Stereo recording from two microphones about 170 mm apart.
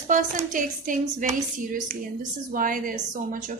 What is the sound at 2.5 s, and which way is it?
Speech, 55° right (ahead or behind).